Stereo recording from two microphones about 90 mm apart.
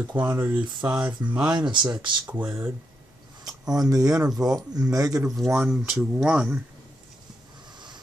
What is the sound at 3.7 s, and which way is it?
Speech, 40° right (ahead or behind).